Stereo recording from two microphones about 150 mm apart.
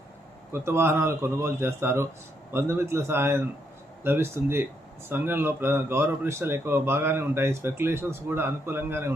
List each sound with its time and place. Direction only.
0.5 s speech: 15° right (ahead or behind)